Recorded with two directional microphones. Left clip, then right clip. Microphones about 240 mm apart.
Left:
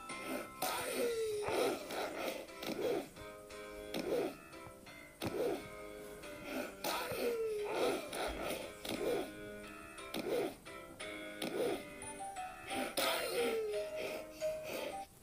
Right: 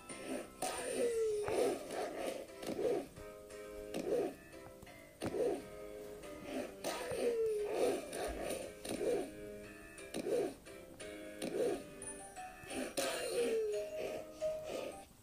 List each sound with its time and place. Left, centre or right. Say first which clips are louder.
0.3 s music: left 1 dB; centre
6.5 s throat clearing: left 2 dB; left
10.1 s music: right 1 dB; centre